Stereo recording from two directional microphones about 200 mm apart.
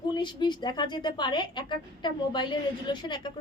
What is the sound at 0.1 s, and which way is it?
Speech, 20° left (ahead or behind).